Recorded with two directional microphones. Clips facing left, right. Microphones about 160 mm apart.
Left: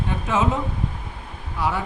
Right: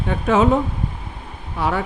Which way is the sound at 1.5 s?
60° right (ahead or behind).